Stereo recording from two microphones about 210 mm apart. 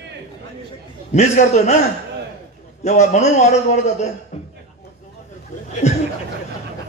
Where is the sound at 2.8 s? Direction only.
35° left (ahead or behind).